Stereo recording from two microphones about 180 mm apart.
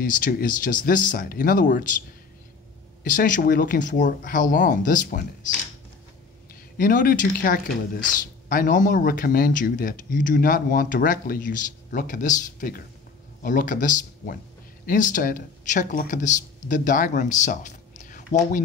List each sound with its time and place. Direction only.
0.0 s speech: 50° left (ahead or behind)
3.0 s speech: 50° left (ahead or behind)
6.8 s speech: 50° left (ahead or behind)